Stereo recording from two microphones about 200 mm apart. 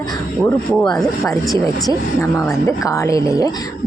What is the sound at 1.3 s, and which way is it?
Speech, 15° left (ahead or behind).